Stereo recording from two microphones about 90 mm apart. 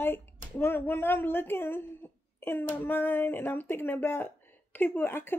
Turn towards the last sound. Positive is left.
turn(degrees=25)  # may be behind; listen again after turning